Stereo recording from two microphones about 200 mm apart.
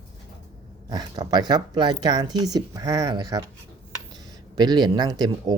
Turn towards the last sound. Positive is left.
turn(degrees=-20)  # may be behind; listen again after turning